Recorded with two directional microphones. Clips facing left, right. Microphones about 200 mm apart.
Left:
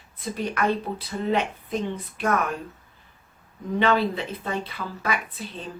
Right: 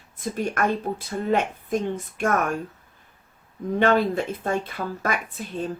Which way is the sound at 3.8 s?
45° right (ahead or behind).